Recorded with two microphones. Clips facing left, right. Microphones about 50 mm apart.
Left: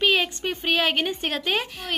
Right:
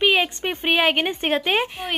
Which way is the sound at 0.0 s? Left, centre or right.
Centre.